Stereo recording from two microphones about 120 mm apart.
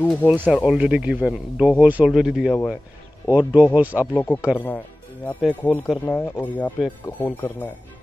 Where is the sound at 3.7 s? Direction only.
15° right (ahead or behind).